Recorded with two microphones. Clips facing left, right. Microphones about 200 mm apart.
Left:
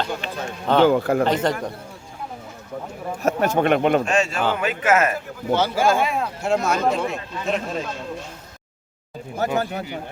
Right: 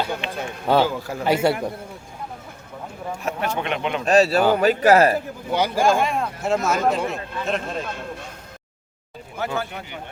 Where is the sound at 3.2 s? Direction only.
45° left (ahead or behind).